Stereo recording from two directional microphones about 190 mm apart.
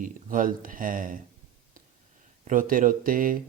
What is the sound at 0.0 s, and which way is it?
Speech, 45° right (ahead or behind).